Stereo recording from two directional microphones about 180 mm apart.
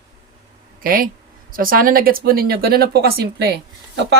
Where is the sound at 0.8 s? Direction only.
55° right (ahead or behind).